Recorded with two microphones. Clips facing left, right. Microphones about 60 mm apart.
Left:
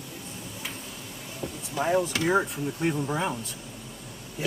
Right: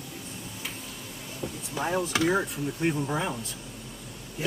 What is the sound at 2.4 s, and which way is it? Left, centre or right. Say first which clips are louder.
Speech: even; centre.